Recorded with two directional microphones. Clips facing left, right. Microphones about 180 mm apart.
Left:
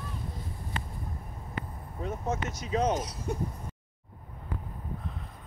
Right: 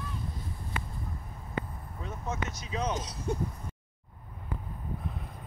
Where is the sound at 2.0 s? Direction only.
40° left (ahead or behind).